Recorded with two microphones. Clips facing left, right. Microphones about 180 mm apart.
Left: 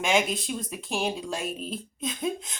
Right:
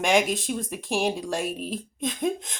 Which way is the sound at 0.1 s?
45° right (ahead or behind).